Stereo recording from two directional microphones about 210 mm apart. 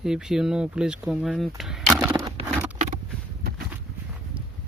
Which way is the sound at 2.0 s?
15° right (ahead or behind).